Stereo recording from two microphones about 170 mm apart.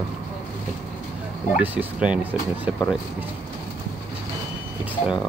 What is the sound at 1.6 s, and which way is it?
Speech, 10° right (ahead or behind).